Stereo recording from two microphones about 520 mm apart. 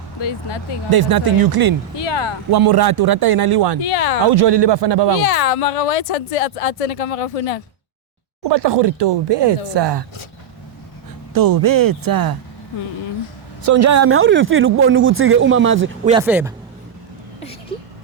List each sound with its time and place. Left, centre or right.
0.2 s speech: left
0.9 s speech: right
3.8 s speech: left
4.3 s speech: right
5.2 s speech: left
8.4 s speech: right
11.3 s speech: right
13.6 s speech: right
16.1 s speech: centre